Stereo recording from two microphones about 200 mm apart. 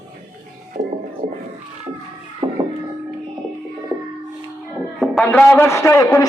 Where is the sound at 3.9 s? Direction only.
15° right (ahead or behind).